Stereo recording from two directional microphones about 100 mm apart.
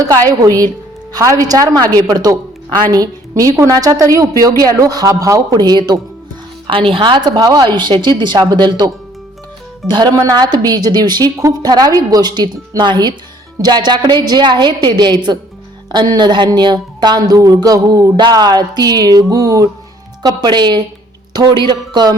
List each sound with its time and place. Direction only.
0.3 s a woman's voice: 40° right (ahead or behind)
6.7 s a woman's voice: 60° right (ahead or behind)
9.9 s a woman's voice: 40° right (ahead or behind)